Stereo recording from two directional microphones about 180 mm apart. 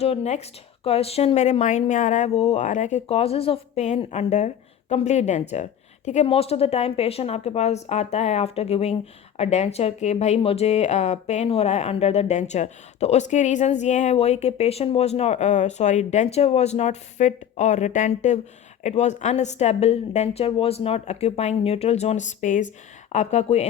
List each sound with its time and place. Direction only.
0.0 s speech: 35° left (ahead or behind)